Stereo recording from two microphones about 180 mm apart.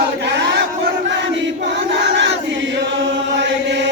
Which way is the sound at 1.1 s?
80° right.